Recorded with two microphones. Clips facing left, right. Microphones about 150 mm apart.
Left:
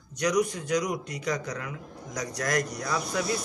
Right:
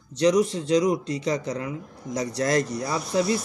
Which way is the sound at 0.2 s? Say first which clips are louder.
Right 6 dB; 25° right (ahead or behind).